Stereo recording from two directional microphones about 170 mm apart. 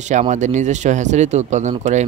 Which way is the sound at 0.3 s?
45° right (ahead or behind).